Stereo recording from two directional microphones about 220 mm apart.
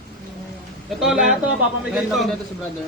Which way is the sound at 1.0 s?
Centre (ahead or behind).